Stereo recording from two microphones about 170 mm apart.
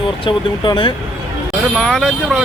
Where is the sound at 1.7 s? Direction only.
Centre (ahead or behind).